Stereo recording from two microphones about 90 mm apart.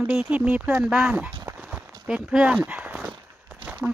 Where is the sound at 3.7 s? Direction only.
10° right (ahead or behind).